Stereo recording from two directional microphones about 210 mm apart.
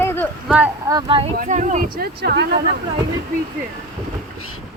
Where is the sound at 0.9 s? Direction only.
25° right (ahead or behind).